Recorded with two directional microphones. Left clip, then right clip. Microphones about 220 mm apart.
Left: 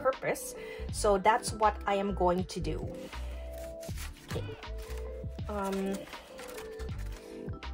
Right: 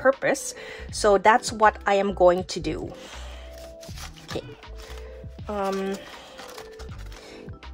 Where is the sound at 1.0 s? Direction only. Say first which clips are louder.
Right 8 dB; 45° right (ahead or behind).